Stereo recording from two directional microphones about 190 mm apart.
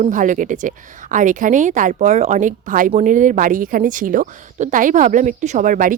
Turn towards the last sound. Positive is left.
turn(degrees=-45)  # may be behind; listen again after turning